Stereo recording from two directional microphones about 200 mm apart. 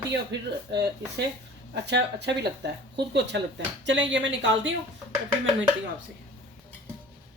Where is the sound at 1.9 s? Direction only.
60° right (ahead or behind).